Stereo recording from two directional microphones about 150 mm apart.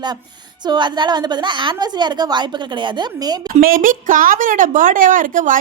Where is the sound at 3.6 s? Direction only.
65° right (ahead or behind).